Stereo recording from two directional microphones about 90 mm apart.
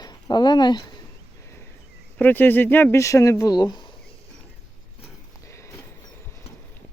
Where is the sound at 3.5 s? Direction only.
50° left (ahead or behind).